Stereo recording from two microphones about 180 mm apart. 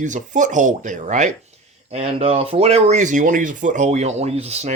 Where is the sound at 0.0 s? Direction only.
45° right (ahead or behind).